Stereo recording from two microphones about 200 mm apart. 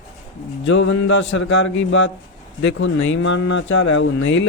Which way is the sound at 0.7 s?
70° left (ahead or behind).